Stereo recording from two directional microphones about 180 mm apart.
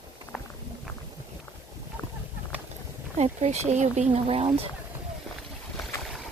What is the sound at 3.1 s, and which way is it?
Speech, 40° right (ahead or behind).